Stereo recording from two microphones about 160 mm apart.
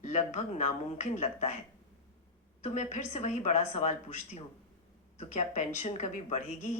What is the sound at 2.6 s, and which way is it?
A woman's voice, 50° left (ahead or behind).